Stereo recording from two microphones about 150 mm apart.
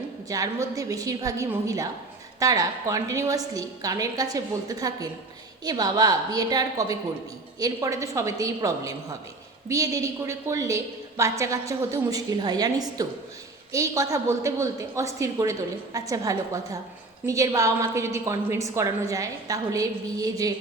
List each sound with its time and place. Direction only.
0.3 s a woman's voice: 25° right (ahead or behind)